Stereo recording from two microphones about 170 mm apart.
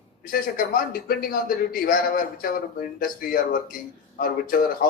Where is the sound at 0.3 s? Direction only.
55° left (ahead or behind).